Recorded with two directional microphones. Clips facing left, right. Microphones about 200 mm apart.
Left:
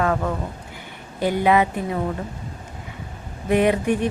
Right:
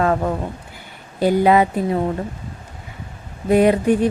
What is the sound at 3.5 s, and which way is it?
Speech, 35° right (ahead or behind).